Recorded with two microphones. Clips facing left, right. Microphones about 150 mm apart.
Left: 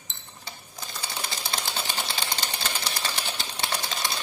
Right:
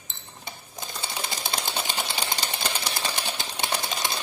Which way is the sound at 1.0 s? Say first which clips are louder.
Right 2 dB; 20° right (ahead or behind).